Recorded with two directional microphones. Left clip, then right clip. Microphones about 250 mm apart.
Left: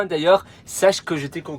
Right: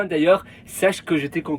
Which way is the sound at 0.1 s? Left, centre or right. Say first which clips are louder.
Left 1 dB; centre.